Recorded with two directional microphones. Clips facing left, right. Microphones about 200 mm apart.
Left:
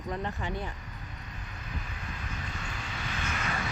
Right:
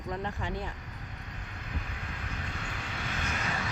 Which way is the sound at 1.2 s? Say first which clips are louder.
Even; 60° right (ahead or behind).